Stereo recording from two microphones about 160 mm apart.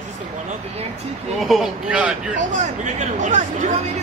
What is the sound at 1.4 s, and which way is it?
Speech, centre (ahead or behind).